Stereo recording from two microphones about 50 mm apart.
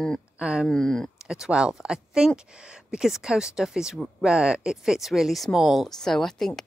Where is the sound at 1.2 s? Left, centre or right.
Centre.